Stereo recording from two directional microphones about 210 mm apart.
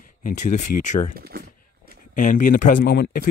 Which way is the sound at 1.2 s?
45° right (ahead or behind).